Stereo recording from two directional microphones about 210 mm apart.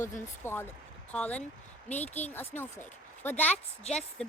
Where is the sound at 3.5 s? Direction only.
30° left (ahead or behind).